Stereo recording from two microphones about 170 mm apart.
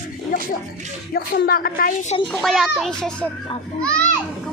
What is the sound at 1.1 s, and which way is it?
Speech, 60° left (ahead or behind).